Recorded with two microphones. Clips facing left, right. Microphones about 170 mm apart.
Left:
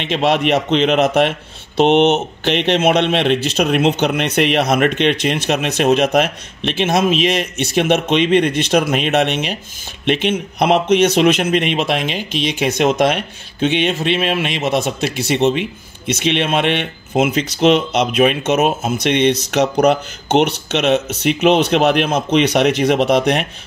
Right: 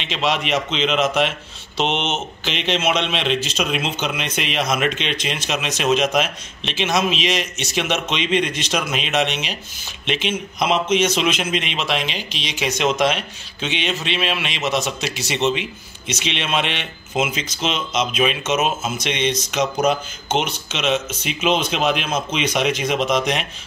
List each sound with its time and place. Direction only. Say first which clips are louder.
0.0 s a man's voice: left 7 dB; 55° left (ahead or behind)